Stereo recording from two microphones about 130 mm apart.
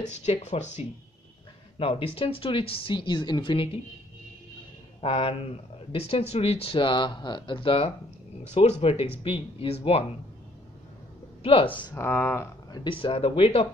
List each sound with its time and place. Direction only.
0.2 s speech: 60° left (ahead or behind)
1.8 s speech: 45° left (ahead or behind)
5.0 s speech: 45° left (ahead or behind)
11.4 s speech: 45° left (ahead or behind)
11.9 s speech: 15° left (ahead or behind)
12.7 s speech: 40° left (ahead or behind)